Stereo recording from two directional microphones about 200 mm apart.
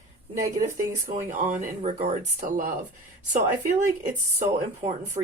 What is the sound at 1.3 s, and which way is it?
Speech, 40° right (ahead or behind).